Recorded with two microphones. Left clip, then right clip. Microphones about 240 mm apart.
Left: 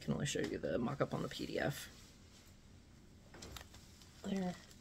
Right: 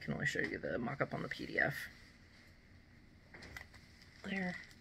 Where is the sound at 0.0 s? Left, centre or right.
Left.